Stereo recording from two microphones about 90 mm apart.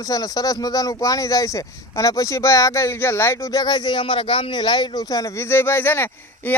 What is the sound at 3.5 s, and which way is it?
A man's voice, 50° left (ahead or behind).